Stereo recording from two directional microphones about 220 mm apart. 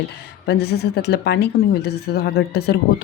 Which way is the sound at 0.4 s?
45° left (ahead or behind).